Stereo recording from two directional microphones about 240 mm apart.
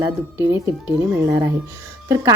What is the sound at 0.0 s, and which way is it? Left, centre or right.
A woman's voice, centre.